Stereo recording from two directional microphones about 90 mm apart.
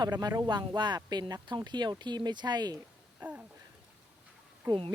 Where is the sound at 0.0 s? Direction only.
50° right (ahead or behind).